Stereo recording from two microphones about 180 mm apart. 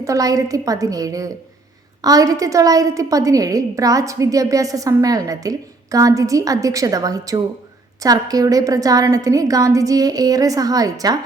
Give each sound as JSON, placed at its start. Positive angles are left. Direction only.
{"t": 0.0, "sound": "a woman's voice", "side_deg": -20}